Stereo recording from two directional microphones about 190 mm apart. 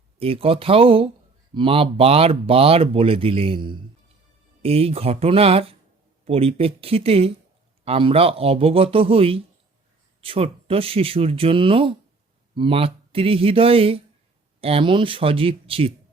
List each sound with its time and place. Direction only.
0.2 s speech: 30° right (ahead or behind)